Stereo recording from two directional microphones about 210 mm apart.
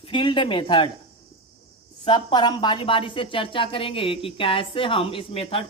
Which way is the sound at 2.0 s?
20° left (ahead or behind).